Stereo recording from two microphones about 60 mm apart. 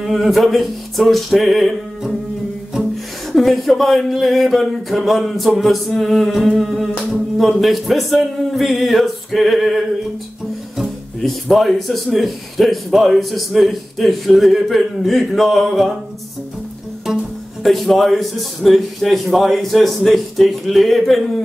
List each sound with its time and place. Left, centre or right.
0.0 s speech: centre
3.3 s speech: centre
11.4 s speech: centre
17.6 s speech: centre